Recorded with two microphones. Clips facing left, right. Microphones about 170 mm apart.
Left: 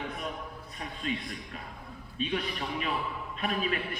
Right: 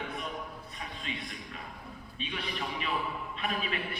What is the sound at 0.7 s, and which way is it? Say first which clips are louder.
Music: left 9 dB; 45° left (ahead or behind).